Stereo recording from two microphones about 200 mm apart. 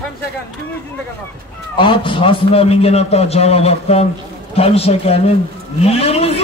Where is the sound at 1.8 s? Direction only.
25° left (ahead or behind).